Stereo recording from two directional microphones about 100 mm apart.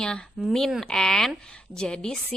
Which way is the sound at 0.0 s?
10° left (ahead or behind).